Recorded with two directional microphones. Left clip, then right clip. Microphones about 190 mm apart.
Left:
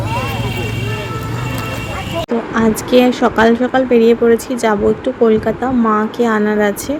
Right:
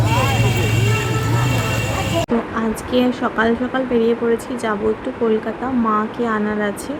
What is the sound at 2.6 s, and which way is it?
A woman's voice, 30° left (ahead or behind).